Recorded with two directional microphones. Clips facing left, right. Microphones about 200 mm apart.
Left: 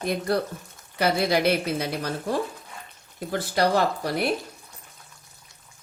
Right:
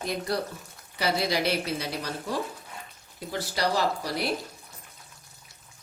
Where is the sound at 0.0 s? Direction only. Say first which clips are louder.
Left 5 dB; 55° left (ahead or behind).